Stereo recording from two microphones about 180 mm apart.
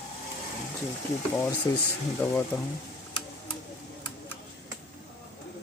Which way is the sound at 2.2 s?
10° left (ahead or behind).